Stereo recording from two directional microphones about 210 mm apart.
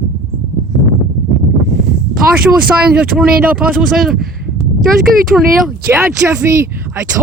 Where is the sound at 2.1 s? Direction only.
5° right (ahead or behind).